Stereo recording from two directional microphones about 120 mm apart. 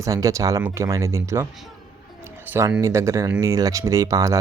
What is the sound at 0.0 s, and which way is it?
Speech, 30° right (ahead or behind).